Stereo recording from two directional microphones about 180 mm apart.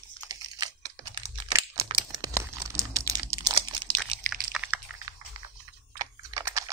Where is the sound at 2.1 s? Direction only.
15° right (ahead or behind).